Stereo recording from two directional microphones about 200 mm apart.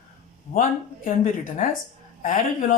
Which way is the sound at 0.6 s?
40° left (ahead or behind).